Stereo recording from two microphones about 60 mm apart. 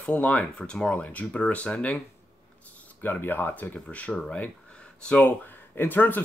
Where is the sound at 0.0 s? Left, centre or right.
Left.